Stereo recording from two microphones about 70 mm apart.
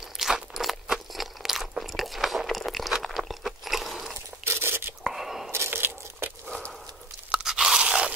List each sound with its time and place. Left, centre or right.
0.2 s crunch: centre
4.5 s whispering: right
5.0 s whispering: centre
5.5 s biting: right
7.2 s crunch: centre